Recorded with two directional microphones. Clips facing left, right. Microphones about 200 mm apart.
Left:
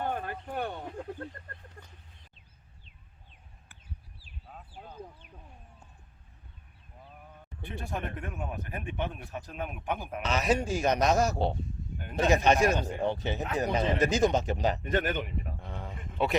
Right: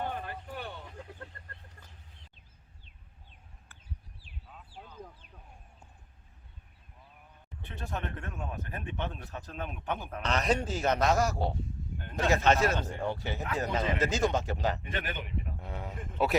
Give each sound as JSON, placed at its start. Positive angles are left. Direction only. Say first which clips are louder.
{"t": 0.1, "sound": "a sound", "louder": "left 4 dB", "side_deg": 50}
{"t": 1.4, "sound": "speech", "louder": "left 5 dB", "side_deg": 50}
{"t": 4.7, "sound": "a sound", "louder": "left 2 dB", "side_deg": 50}
{"t": 7.6, "sound": "a man's voice", "louder": "left 2 dB", "side_deg": 15}
{"t": 14.8, "sound": "speech", "louder": "left 8 dB", "side_deg": 45}
{"t": 15.6, "sound": "a man's voice", "louder": "right 1 dB", "side_deg": -5}